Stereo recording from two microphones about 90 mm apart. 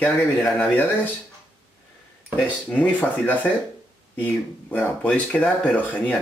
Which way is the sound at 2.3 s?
15° left (ahead or behind).